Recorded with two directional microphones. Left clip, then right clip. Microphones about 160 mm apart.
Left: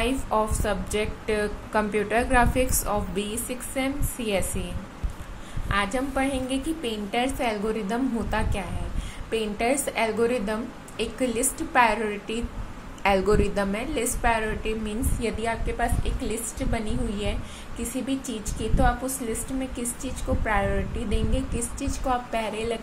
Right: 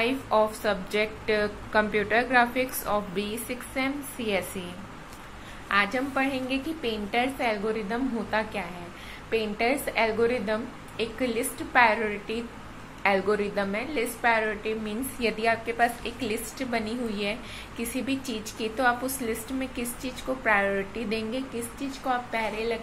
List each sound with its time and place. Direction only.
0.0 s a woman's voice: 15° left (ahead or behind)
5.7 s a woman's voice: 15° left (ahead or behind)
13.4 s a woman's voice: 25° left (ahead or behind)
15.1 s a woman's voice: 10° left (ahead or behind)
22.0 s a woman's voice: 25° left (ahead or behind)